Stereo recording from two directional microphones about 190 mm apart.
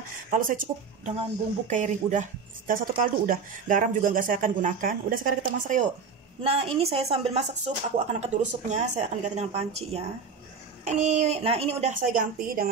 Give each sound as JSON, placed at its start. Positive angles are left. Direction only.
{"t": 0.3, "sound": "a woman's voice", "side_deg": -45}
{"t": 6.4, "sound": "a woman's voice", "side_deg": -30}